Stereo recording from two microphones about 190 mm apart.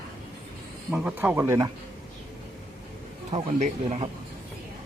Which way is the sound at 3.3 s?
35° right (ahead or behind).